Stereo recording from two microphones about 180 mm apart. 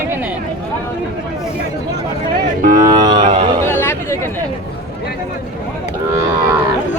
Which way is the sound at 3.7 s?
10° left (ahead or behind).